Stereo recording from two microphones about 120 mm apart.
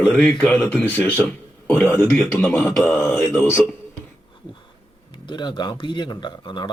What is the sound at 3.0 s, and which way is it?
Speech, 20° left (ahead or behind).